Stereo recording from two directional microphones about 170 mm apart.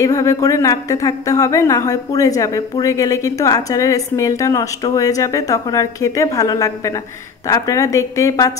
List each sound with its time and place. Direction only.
0.0 s a woman's voice: 20° left (ahead or behind)